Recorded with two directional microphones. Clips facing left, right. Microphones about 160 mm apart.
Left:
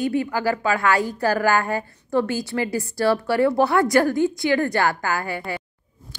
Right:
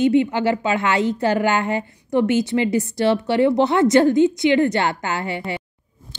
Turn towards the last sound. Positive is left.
turn(degrees=-20)  # may be behind; listen again after turning